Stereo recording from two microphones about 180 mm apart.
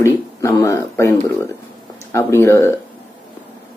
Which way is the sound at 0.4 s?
15° left (ahead or behind).